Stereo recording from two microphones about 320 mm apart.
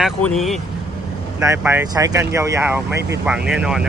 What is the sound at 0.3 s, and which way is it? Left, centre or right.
Speech, centre.